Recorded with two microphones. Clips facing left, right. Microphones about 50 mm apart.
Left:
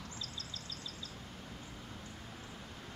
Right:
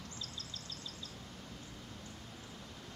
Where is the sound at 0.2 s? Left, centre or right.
Right.